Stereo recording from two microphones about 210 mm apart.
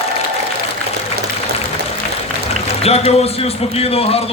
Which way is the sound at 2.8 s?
30° left (ahead or behind).